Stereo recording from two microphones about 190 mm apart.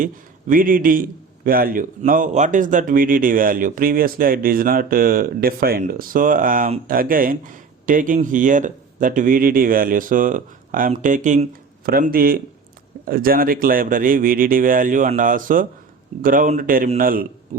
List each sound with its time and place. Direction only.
0.0 s a man's voice: 45° right (ahead or behind)